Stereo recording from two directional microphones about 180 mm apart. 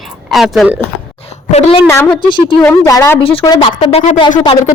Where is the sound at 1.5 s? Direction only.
35° left (ahead or behind).